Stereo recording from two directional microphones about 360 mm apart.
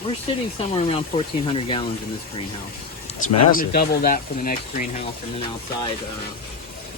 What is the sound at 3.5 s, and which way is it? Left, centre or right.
Speech, left.